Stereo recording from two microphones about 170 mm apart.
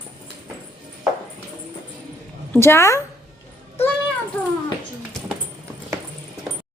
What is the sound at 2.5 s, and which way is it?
Speech, 15° left (ahead or behind).